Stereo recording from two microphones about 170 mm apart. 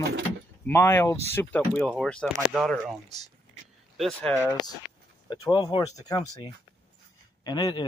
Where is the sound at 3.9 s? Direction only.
Centre (ahead or behind).